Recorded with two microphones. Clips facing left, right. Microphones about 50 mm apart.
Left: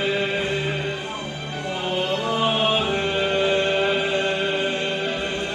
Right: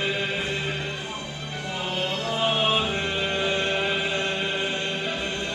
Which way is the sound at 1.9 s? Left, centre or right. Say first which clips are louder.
Left 4 dB; centre.